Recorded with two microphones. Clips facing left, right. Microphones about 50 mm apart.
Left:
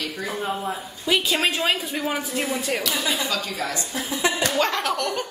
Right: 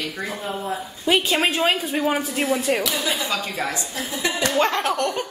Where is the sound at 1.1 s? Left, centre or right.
Centre.